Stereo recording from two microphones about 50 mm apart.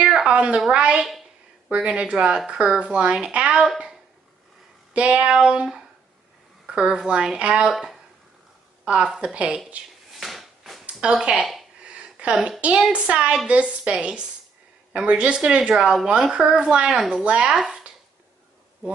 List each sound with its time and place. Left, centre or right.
0.0 s a sound: centre
0.3 s speech: right
4.9 s speech: right
8.8 s speech: centre
9.3 s speech: right
10.1 s drawer open or close: centre
10.9 s speech: centre
11.3 s speech: centre
11.8 s a sound: right
12.4 s speech: right